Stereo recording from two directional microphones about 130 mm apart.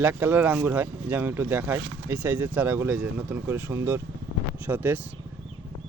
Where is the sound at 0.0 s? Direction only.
15° right (ahead or behind).